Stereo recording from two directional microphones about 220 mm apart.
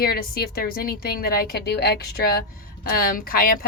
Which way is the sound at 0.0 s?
45° left (ahead or behind).